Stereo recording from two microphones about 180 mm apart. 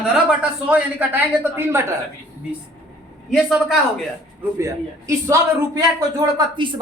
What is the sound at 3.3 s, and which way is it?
Speech, centre (ahead or behind).